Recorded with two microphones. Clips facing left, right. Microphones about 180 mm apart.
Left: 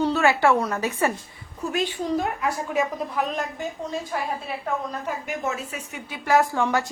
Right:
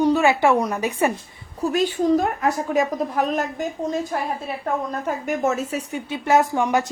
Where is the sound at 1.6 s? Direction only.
40° right (ahead or behind); by 6.9 s 15° right (ahead or behind).